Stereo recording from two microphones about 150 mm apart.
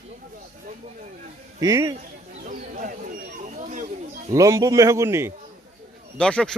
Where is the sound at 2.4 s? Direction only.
60° right (ahead or behind).